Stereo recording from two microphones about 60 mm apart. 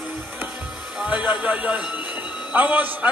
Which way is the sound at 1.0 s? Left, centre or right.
Right.